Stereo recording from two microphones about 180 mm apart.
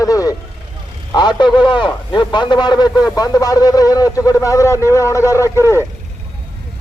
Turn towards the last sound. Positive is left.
turn(degrees=15)  # may be behind; listen again after turning